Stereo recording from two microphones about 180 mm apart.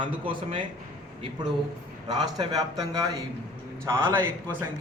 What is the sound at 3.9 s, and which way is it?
Speech, 15° right (ahead or behind).